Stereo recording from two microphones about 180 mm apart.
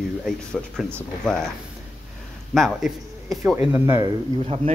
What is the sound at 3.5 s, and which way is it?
Speech, 15° right (ahead or behind).